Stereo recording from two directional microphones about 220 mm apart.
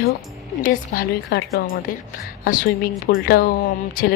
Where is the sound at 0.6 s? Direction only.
40° left (ahead or behind).